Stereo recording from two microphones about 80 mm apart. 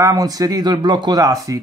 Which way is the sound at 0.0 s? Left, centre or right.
Right.